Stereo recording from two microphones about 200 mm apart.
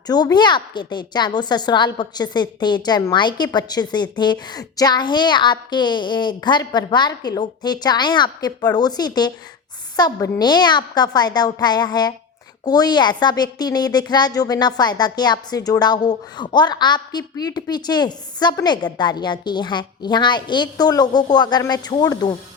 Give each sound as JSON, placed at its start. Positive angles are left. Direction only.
{"t": 0.1, "sound": "a woman's voice", "side_deg": 20}